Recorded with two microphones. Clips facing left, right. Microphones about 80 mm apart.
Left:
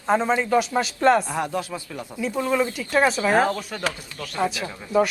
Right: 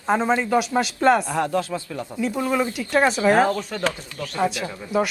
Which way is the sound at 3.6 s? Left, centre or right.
Centre.